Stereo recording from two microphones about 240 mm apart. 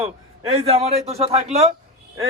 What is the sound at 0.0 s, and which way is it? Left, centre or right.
A man's voice, right.